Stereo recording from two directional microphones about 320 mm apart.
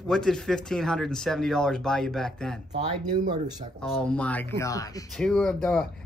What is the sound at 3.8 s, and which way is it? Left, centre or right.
Speech, centre.